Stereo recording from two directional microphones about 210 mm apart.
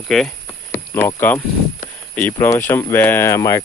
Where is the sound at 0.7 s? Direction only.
10° left (ahead or behind).